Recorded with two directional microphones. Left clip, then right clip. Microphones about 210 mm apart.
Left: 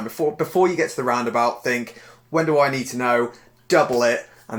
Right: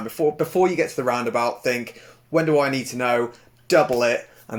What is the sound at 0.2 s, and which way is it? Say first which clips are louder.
Speech: even; 35° right (ahead or behind).